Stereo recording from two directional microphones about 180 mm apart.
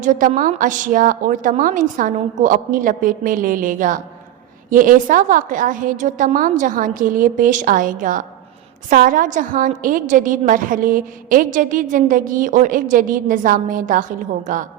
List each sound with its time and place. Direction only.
0.0 s a woman's voice: 45° right (ahead or behind)